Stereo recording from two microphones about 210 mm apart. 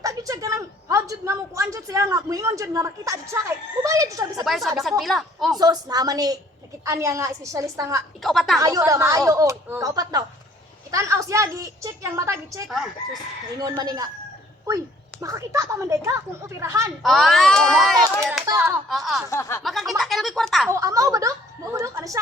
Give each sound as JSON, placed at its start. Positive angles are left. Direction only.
{"t": 0.0, "sound": "a woman's voice", "side_deg": -15}
{"t": 4.4, "sound": "a child's voice", "side_deg": 0}
{"t": 5.5, "sound": "a woman's voice", "side_deg": -20}
{"t": 8.2, "sound": "a child's voice", "side_deg": 0}
{"t": 8.5, "sound": "a woman's voice", "side_deg": -15}
{"t": 12.6, "sound": "a child's voice", "side_deg": 0}
{"t": 13.6, "sound": "a woman's voice", "side_deg": -15}
{"t": 15.2, "sound": "a woman's voice", "side_deg": -15}
{"t": 17.0, "sound": "a child's voice", "side_deg": 0}
{"t": 18.4, "sound": "a woman's voice", "side_deg": -15}
{"t": 18.9, "sound": "a child's voice", "side_deg": 0}
{"t": 19.3, "sound": "speech", "side_deg": 15}
{"t": 19.6, "sound": "a child's voice", "side_deg": 0}
{"t": 20.7, "sound": "a woman's voice", "side_deg": -15}